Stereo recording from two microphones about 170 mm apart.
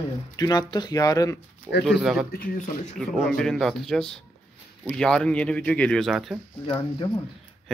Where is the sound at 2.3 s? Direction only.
55° left (ahead or behind).